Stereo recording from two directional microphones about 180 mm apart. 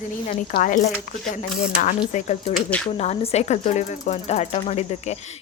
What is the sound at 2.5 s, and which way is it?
Speech, 5° left (ahead or behind).